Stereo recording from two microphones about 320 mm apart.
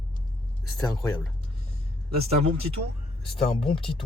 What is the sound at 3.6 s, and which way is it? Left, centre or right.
Speech, centre.